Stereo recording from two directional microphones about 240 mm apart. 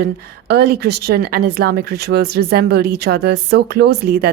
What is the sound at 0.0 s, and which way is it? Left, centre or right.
A woman's voice, right.